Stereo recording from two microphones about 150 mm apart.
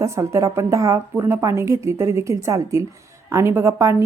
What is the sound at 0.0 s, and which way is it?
Speech, 20° right (ahead or behind).